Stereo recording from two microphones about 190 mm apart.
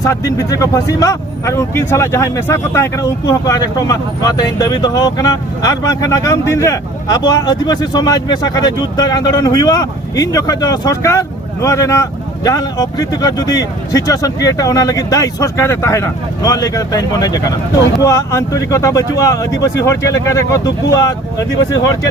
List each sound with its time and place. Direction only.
0.0 s speech: 15° left (ahead or behind)